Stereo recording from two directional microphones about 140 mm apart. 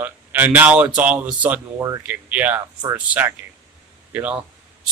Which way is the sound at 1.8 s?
20° right (ahead or behind).